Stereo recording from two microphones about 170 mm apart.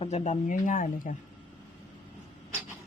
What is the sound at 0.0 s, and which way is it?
Speech, 40° left (ahead or behind).